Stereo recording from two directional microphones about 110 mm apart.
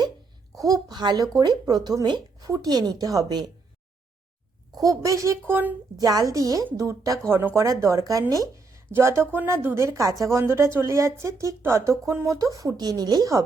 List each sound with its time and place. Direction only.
0.7 s speech: 40° right (ahead or behind)
4.8 s a woman's voice: 30° right (ahead or behind)
6.0 s a woman's voice: 35° right (ahead or behind)